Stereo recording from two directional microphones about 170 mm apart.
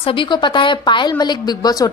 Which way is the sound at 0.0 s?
30° left (ahead or behind).